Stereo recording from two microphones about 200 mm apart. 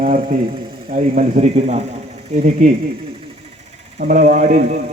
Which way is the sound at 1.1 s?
35° right (ahead or behind).